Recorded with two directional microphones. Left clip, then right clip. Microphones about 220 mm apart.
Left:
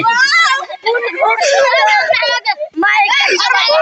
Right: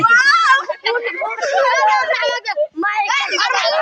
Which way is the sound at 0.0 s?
35° right (ahead or behind).